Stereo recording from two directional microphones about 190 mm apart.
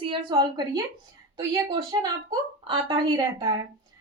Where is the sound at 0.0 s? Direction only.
25° right (ahead or behind).